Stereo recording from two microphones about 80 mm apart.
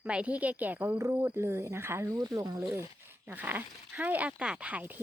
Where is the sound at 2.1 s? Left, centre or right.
Right.